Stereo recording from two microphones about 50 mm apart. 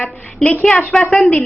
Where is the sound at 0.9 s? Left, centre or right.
Centre.